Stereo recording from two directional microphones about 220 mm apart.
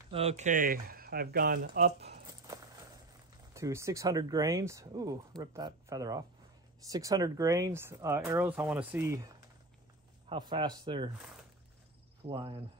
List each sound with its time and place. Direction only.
0.1 s speech: 30° right (ahead or behind); by 2.1 s 45° right (ahead or behind)
3.5 s speech: 15° right (ahead or behind)
10.3 s a man's voice: 20° right (ahead or behind)
12.3 s a man's voice: 25° right (ahead or behind)